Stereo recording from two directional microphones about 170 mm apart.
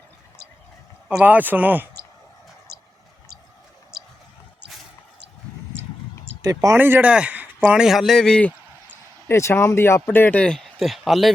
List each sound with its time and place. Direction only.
1.0 s speech: 5° right (ahead or behind)
2.7 s a sound: 65° right (ahead or behind)
6.4 s speech: 20° right (ahead or behind); by 11.3 s centre (ahead or behind)